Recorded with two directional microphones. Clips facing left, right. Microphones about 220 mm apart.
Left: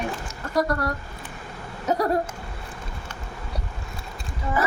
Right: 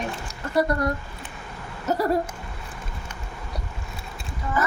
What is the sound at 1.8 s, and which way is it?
Speech, 5° right (ahead or behind).